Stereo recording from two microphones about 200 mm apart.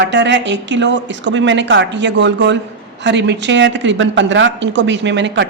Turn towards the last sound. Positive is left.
turn(degrees=-60)  # may be behind; listen again after turning